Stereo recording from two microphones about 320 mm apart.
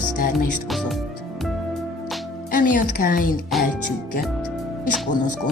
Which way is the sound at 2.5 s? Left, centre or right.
Left.